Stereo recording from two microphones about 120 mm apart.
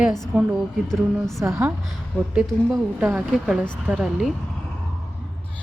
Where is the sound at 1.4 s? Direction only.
25° right (ahead or behind).